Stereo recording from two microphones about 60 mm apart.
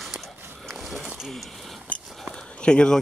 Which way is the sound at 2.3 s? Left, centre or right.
Centre.